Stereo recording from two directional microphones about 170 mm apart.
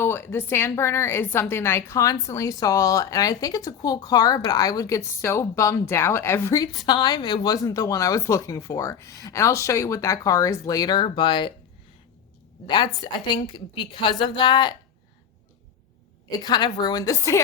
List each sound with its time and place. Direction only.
0.0 s a woman's voice: 15° left (ahead or behind); by 11.5 s 30° left (ahead or behind)
12.6 s speech: 25° left (ahead or behind)
16.3 s speech: 25° left (ahead or behind)